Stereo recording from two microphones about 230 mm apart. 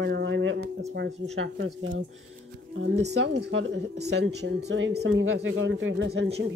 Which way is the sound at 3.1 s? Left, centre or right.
Right.